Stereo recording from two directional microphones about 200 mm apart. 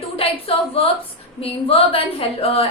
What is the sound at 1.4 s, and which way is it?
A woman's voice, 30° left (ahead or behind).